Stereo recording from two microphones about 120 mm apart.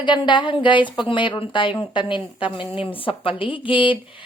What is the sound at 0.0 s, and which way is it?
A woman's voice, 40° left (ahead or behind).